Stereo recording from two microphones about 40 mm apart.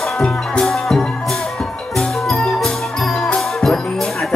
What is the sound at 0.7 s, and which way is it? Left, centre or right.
Music, centre.